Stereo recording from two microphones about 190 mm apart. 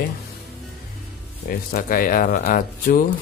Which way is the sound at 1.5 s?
50° left (ahead or behind).